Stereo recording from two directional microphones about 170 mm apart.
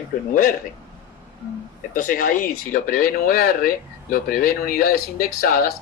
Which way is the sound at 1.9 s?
55° left (ahead or behind).